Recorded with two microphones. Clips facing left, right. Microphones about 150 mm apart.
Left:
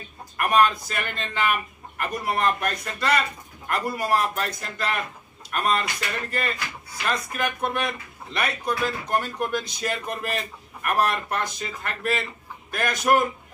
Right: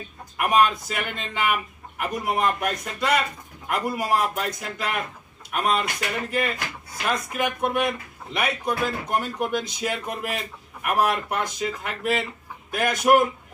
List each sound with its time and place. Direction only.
0.4 s speech: 5° right (ahead or behind)
7.1 s speech: 10° right (ahead or behind)